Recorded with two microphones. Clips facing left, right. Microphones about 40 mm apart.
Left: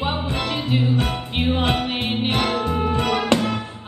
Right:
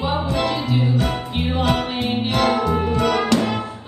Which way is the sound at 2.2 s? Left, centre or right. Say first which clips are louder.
Right 4 dB; left.